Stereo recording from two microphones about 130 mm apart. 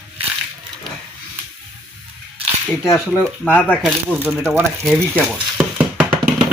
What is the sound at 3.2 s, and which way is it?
Speech, 10° left (ahead or behind).